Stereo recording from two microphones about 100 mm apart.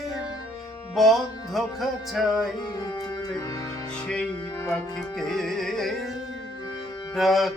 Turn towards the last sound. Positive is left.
turn(degrees=0)  # may be behind; listen again after turning